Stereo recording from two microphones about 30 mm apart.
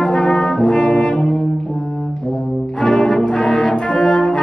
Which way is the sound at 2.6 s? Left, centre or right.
Left.